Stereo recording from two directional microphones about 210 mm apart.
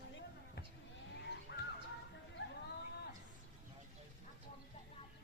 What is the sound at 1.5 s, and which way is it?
Music, 55° left (ahead or behind).